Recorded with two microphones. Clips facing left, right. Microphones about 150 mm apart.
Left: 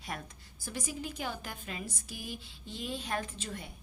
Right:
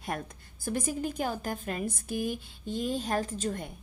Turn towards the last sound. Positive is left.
turn(degrees=-45)  # may be behind; listen again after turning